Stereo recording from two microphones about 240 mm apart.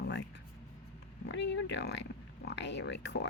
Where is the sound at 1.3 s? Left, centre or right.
Left.